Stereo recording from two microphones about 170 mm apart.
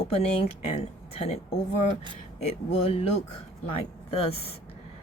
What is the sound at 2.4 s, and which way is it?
Speech, 35° left (ahead or behind).